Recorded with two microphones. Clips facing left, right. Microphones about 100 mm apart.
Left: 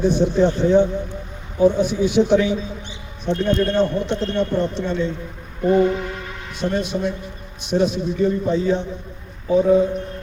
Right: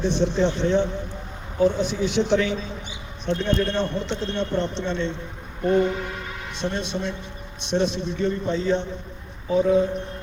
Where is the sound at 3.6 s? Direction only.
10° left (ahead or behind).